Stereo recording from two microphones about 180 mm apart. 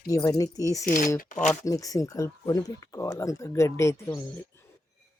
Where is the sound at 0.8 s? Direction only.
50° left (ahead or behind).